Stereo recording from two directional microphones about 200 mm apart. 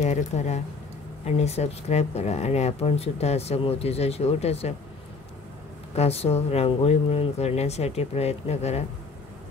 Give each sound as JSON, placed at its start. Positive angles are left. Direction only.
{"t": 0.0, "sound": "speech", "side_deg": 35}
{"t": 5.9, "sound": "speech", "side_deg": 30}